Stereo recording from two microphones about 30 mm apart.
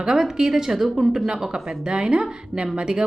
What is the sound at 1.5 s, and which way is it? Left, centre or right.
Speech, right.